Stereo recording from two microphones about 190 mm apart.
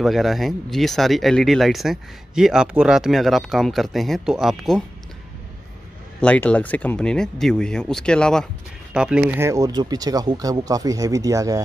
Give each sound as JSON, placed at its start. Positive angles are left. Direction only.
{"t": 0.0, "sound": "speech", "side_deg": 0}
{"t": 6.2, "sound": "speech", "side_deg": 5}